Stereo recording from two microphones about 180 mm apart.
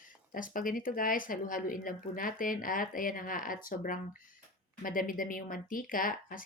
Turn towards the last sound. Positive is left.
turn(degrees=50)  # may be behind; listen again after turning